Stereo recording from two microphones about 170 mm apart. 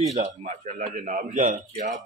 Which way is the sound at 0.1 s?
40° right (ahead or behind).